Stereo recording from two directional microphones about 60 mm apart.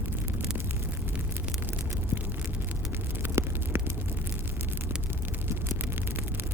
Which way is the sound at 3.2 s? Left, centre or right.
Right.